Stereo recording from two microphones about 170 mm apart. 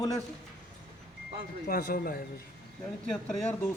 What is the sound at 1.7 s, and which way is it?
Speech, 55° left (ahead or behind).